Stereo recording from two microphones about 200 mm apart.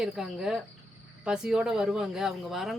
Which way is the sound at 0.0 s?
5° right (ahead or behind).